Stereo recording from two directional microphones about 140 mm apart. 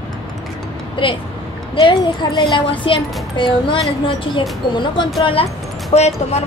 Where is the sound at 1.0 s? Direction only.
35° left (ahead or behind).